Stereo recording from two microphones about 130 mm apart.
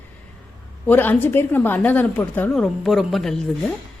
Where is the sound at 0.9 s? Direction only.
15° left (ahead or behind).